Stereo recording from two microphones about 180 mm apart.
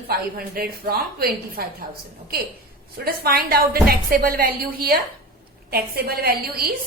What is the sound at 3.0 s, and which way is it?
A woman's voice, 60° right (ahead or behind).